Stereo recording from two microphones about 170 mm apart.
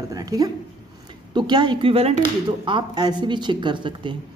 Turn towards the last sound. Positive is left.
turn(degrees=-30)  # may be behind; listen again after turning